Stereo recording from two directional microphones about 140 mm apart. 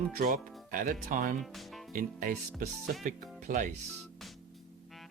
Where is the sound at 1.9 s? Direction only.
80° right.